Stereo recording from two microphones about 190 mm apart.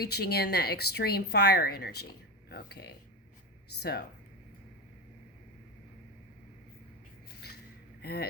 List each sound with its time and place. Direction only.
0.0 s speech: 60° left (ahead or behind)
7.4 s a sound: 60° left (ahead or behind)
8.0 s speech: 60° left (ahead or behind)